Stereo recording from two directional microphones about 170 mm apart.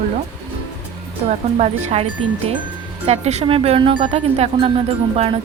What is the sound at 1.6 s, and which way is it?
Speech, 40° right (ahead or behind).